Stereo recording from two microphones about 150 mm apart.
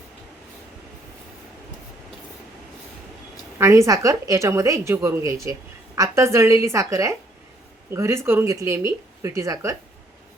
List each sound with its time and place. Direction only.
3.6 s a woman's voice: 20° right (ahead or behind)